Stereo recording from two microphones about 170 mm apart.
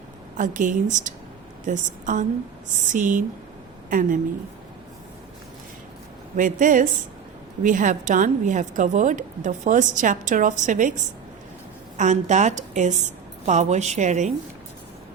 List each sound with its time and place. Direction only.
0.3 s a woman's voice: 50° right (ahead or behind)
6.3 s a woman's voice: 50° right (ahead or behind)